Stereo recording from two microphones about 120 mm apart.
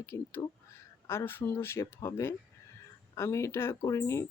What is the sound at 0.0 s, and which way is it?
Speech, 20° left (ahead or behind).